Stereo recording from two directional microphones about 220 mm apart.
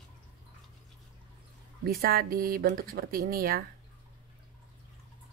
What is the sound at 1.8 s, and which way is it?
Speech, 45° right (ahead or behind).